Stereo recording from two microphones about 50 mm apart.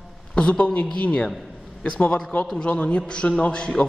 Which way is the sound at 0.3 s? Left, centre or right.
Left.